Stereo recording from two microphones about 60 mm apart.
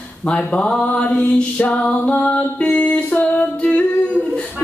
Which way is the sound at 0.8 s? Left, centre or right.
Left.